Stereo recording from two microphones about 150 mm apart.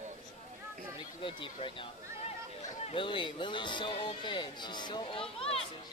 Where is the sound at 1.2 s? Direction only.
35° left (ahead or behind).